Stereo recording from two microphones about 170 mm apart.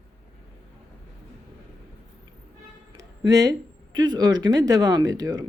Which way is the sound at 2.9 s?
20° right (ahead or behind).